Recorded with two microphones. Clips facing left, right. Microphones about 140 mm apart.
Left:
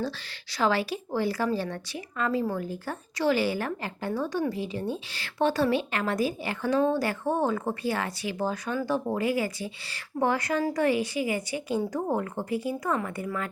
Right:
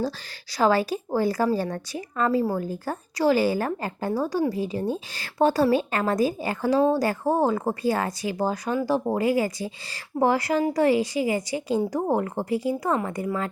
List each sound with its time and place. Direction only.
0.5 s speech: 40° right (ahead or behind)